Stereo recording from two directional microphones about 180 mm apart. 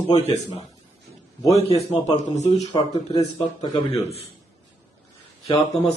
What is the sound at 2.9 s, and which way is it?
Speech, 20° left (ahead or behind).